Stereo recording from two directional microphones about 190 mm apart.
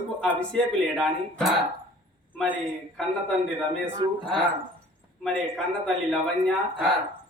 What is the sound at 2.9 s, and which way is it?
Speech, 5° left (ahead or behind).